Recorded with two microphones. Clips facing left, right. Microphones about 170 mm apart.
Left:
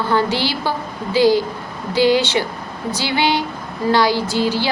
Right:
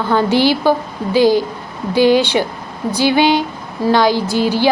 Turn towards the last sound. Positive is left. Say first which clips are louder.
# right 3 dB
turn(degrees=-15)  # may be behind; listen again after turning